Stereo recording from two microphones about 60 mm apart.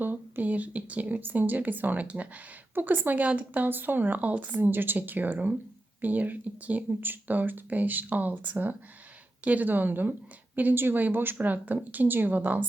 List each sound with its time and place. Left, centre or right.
0.0 s speech: right